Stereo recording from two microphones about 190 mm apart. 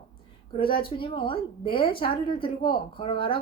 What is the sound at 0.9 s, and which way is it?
A woman's voice, 25° left (ahead or behind).